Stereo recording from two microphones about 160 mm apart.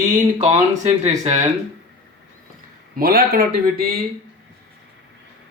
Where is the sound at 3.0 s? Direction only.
70° right (ahead or behind).